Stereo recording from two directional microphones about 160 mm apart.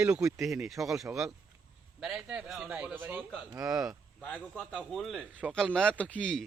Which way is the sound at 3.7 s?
5° right (ahead or behind).